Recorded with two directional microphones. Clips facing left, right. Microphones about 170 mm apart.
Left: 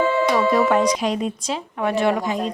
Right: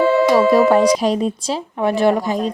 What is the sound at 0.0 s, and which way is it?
Music, 40° right (ahead or behind).